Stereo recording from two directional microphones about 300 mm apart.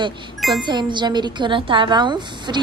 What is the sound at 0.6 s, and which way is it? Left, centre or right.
Speech, centre.